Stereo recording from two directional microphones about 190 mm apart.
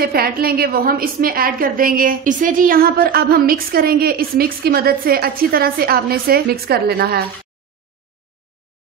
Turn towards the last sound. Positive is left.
turn(degrees=-55)  # may be behind; listen again after turning